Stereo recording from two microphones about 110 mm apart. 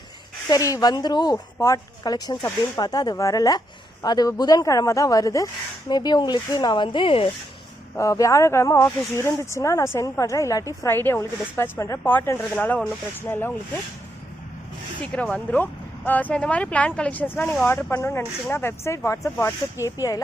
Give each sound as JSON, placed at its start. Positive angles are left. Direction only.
{"t": 0.5, "sound": "a woman's voice", "side_deg": 35}
{"t": 7.9, "sound": "speech", "side_deg": 30}
{"t": 10.8, "sound": "speech", "side_deg": 20}
{"t": 15.0, "sound": "a woman's voice", "side_deg": 10}